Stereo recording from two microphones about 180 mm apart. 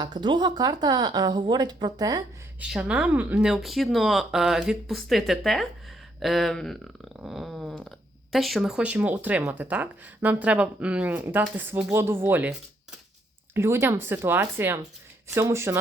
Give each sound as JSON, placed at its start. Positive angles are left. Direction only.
{"t": 0.0, "sound": "speech", "side_deg": -25}
{"t": 2.6, "sound": "speech", "side_deg": -5}